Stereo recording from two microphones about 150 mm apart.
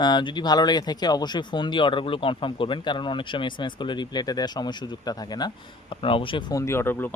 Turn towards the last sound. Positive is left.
turn(degrees=15)  # may be behind; listen again after turning